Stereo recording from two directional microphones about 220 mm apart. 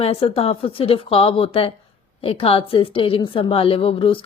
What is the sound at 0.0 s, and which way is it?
A woman's voice, 25° left (ahead or behind).